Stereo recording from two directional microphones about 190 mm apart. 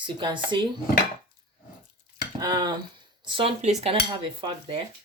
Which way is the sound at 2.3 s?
20° right (ahead or behind).